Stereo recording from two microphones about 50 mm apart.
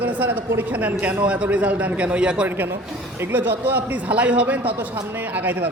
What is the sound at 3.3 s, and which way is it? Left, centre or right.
A man's voice, right.